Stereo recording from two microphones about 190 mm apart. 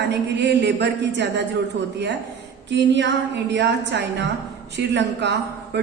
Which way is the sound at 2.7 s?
70° right (ahead or behind).